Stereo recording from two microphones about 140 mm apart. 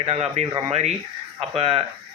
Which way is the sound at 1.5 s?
45° right (ahead or behind).